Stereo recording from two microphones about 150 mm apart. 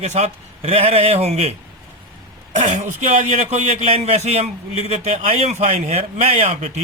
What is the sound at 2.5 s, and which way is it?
A man's voice, 50° right (ahead or behind).